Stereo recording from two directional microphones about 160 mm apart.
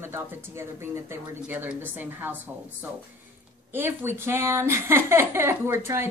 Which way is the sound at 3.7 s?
15° right (ahead or behind).